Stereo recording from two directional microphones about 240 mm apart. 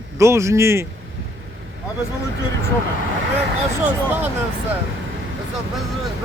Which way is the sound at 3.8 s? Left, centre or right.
Centre.